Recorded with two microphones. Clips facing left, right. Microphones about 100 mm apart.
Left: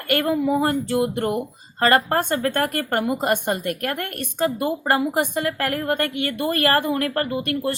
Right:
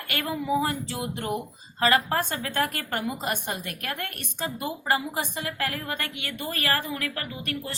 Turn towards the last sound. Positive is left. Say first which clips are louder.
# left 10 dB
turn(degrees=60)  # may be behind; listen again after turning